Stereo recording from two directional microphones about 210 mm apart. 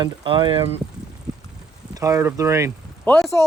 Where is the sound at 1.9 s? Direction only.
15° right (ahead or behind).